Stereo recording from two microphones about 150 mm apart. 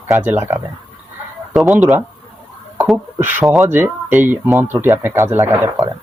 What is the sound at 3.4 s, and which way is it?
Speech, centre (ahead or behind).